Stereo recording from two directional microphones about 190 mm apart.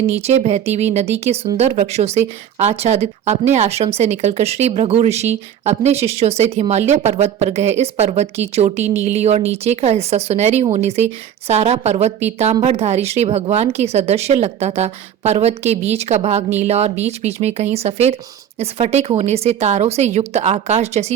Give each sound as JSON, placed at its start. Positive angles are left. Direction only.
{"t": 0.0, "sound": "speech", "side_deg": -35}